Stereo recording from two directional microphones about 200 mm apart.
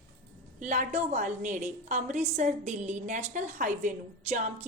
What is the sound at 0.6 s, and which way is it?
A woman's voice, 35° right (ahead or behind).